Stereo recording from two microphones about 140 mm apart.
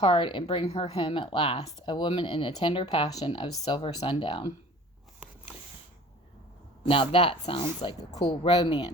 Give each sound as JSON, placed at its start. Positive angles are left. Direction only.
{"t": 0.0, "sound": "speech", "side_deg": 40}
{"t": 1.8, "sound": "speech", "side_deg": 35}
{"t": 6.8, "sound": "speech", "side_deg": 40}